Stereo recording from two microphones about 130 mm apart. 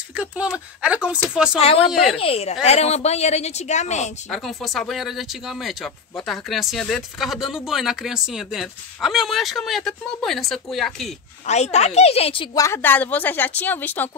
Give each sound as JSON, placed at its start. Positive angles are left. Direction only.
{"t": 0.1, "sound": "speech", "side_deg": -10}
{"t": 1.6, "sound": "a woman's voice", "side_deg": 50}
{"t": 1.9, "sound": "speech", "side_deg": 0}
{"t": 2.1, "sound": "a woman's voice", "side_deg": 50}
{"t": 4.3, "sound": "speech", "side_deg": 0}
{"t": 11.4, "sound": "a woman's voice", "side_deg": 60}
{"t": 12.5, "sound": "speech", "side_deg": 20}